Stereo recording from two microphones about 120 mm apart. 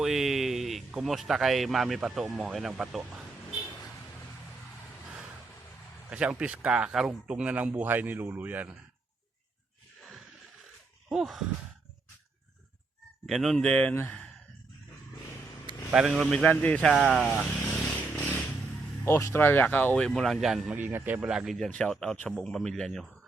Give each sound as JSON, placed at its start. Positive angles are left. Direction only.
{"t": 0.0, "sound": "speech", "side_deg": 0}
{"t": 6.1, "sound": "speech", "side_deg": -10}
{"t": 11.1, "sound": "speech", "side_deg": 0}
{"t": 13.2, "sound": "speech", "side_deg": 0}
{"t": 15.9, "sound": "speech", "side_deg": -5}
{"t": 16.1, "sound": "speech", "side_deg": 5}
{"t": 16.9, "sound": "speech", "side_deg": 0}
{"t": 19.0, "sound": "speech", "side_deg": 20}
{"t": 20.1, "sound": "speech", "side_deg": 0}
{"t": 20.7, "sound": "speech", "side_deg": -15}